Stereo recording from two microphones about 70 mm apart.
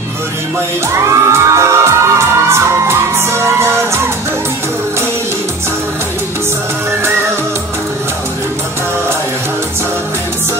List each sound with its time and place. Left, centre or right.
0.9 s music: right